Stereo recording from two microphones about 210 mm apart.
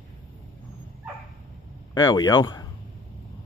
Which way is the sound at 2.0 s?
20° left (ahead or behind).